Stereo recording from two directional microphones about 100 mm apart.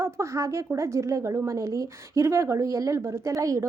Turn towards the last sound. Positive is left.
turn(degrees=-35)  # may be behind; listen again after turning